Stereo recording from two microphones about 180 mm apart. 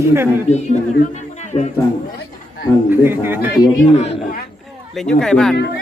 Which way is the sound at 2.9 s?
10° right (ahead or behind).